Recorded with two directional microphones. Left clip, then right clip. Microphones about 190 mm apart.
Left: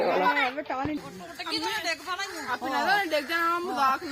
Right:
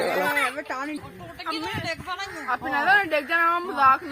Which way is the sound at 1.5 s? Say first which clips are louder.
Left 1 dB; 55° right (ahead or behind).